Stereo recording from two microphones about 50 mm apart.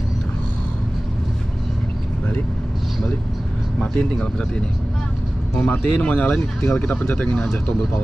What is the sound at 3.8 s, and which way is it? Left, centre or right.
Speech, left.